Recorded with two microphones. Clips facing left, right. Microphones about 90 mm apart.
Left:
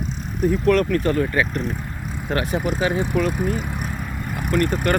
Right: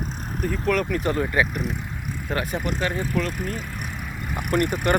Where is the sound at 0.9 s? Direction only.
15° right (ahead or behind).